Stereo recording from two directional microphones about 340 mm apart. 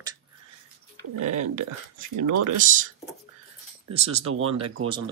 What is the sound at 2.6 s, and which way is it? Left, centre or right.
Speech, right.